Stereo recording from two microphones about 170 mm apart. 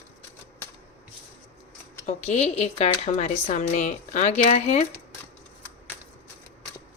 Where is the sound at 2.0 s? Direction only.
40° left (ahead or behind).